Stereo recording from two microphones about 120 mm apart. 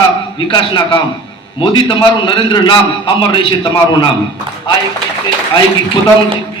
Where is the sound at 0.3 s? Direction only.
40° left (ahead or behind).